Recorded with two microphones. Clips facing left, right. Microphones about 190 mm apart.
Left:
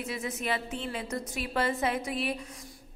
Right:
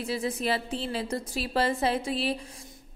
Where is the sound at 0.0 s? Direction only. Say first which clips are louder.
Right 5 dB; 30° right (ahead or behind).